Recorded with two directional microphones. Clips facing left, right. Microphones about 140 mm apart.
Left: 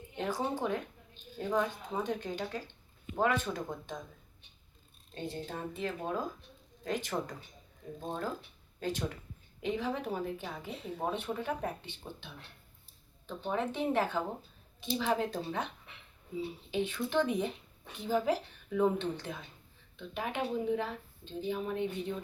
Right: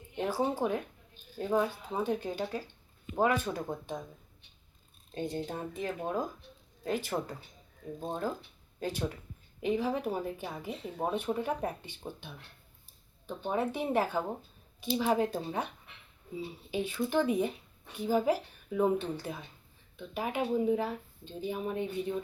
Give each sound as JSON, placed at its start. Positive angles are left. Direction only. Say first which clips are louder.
{"t": 0.2, "sound": "speech", "louder": "right 3 dB", "side_deg": -10}
{"t": 5.1, "sound": "speech", "louder": "right 4 dB", "side_deg": -15}
{"t": 16.7, "sound": "speech", "louder": "right 1 dB", "side_deg": -10}